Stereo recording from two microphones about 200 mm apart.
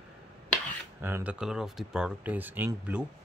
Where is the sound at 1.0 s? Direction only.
10° right (ahead or behind).